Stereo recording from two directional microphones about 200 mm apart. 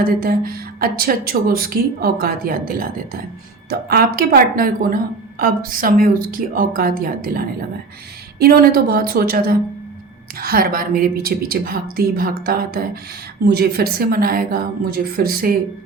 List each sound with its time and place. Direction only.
0.0 s a woman's voice: 45° right (ahead or behind)